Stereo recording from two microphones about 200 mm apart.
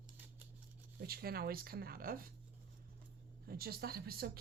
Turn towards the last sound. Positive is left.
turn(degrees=-50)  # may be behind; listen again after turning